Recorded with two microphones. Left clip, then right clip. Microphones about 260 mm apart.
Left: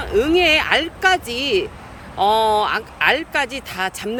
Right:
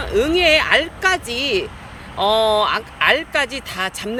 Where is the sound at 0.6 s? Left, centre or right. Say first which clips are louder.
Right 1 dB; centre.